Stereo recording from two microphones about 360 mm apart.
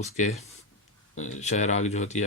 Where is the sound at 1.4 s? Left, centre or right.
Centre.